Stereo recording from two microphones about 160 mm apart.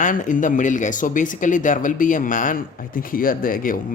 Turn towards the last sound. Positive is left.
turn(degrees=60)  # may be behind; listen again after turning